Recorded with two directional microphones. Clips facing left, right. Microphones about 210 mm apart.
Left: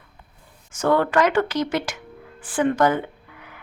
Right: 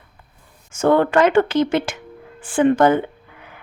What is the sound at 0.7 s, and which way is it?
Speech, 25° right (ahead or behind).